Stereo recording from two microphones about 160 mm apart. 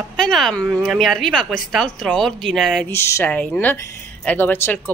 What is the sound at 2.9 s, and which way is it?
Speech, 15° left (ahead or behind).